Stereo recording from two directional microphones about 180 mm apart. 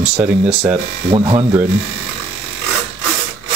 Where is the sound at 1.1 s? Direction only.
30° right (ahead or behind).